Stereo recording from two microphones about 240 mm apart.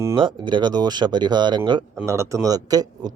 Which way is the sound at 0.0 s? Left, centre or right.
Centre.